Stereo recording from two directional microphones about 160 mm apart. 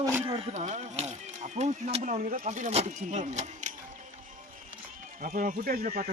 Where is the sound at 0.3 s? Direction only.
35° right (ahead or behind).